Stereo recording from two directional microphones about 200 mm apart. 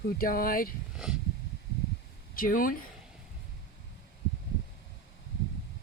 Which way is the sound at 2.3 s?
45° left (ahead or behind).